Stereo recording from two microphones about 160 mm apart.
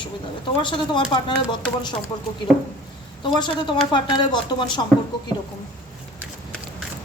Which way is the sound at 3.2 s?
30° left (ahead or behind).